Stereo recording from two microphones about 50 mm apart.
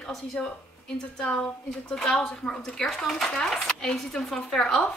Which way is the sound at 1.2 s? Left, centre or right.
Centre.